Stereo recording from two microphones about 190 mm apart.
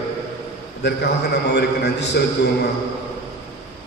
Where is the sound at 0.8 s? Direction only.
60° left (ahead or behind).